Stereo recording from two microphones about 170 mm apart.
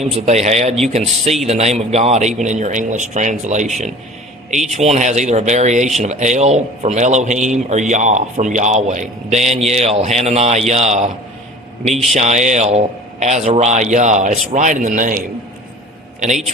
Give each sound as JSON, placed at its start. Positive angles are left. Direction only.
{"t": 0.1, "sound": "speech", "side_deg": -40}